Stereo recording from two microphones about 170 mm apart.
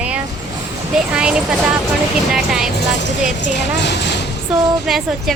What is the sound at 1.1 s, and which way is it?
A woman's voice, 5° right (ahead or behind).